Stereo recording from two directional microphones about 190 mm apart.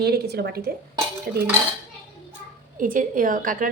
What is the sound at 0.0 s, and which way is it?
A woman's voice, 60° right (ahead or behind).